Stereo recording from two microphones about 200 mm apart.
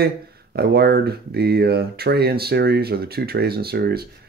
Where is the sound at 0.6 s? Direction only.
50° right (ahead or behind).